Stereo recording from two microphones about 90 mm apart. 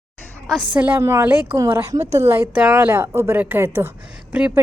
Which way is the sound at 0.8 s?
20° right (ahead or behind).